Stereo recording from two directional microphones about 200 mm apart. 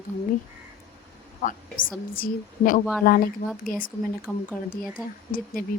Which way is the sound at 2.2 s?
45° left (ahead or behind).